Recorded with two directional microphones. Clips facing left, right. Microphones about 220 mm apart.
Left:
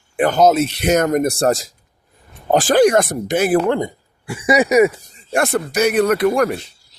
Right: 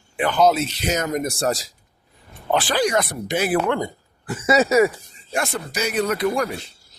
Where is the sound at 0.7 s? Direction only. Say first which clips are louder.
Left 8 dB; 60° left (ahead or behind).